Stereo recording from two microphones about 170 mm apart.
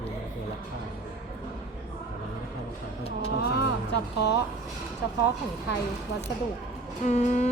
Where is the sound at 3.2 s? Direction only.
70° left (ahead or behind).